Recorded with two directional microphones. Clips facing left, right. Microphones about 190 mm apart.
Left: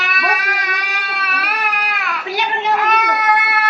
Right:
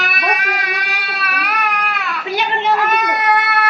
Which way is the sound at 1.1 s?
Centre (ahead or behind).